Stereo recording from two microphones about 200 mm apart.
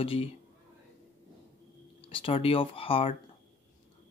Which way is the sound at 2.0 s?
25° left (ahead or behind).